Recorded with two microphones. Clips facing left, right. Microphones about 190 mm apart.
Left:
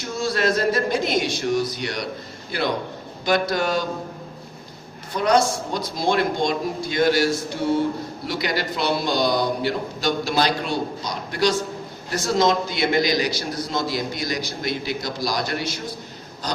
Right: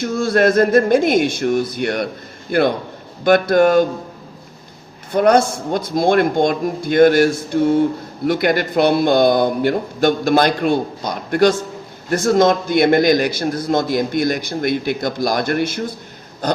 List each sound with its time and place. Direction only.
0.0 s a man's voice: 55° right (ahead or behind)
5.1 s a man's voice: 55° right (ahead or behind)
16.4 s a sound: 55° right (ahead or behind)